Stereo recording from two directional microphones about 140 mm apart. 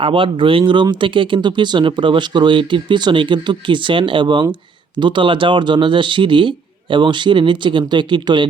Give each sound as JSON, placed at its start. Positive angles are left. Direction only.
{"t": 0.0, "sound": "speech", "side_deg": -40}